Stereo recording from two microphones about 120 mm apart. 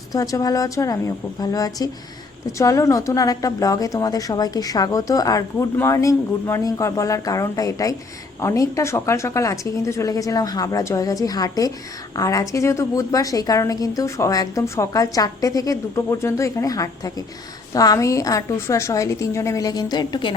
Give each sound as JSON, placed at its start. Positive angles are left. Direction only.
{"t": 0.1, "sound": "a woman's voice", "side_deg": 30}